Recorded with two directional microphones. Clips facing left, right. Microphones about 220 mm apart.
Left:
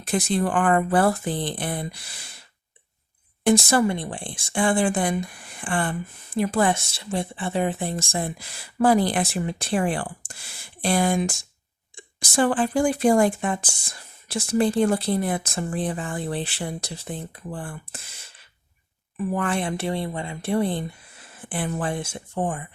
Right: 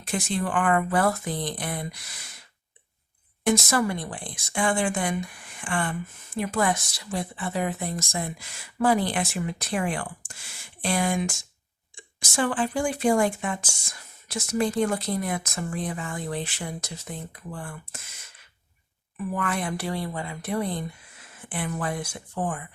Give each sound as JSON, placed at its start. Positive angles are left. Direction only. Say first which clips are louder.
{"t": 0.0, "sound": "speech", "louder": "left 5 dB", "side_deg": 35}
{"t": 3.4, "sound": "speech", "louder": "left 4 dB", "side_deg": 30}